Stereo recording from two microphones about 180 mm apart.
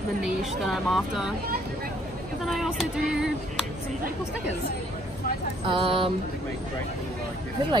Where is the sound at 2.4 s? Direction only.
Centre (ahead or behind).